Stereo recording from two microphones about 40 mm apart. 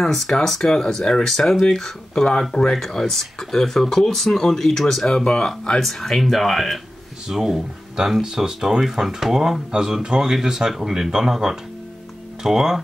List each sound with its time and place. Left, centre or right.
0.0 s speech: centre
5.8 s speech: centre
7.2 s speech: centre